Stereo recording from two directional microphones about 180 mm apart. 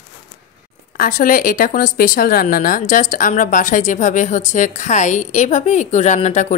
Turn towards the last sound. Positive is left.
turn(degrees=40)  # may be behind; listen again after turning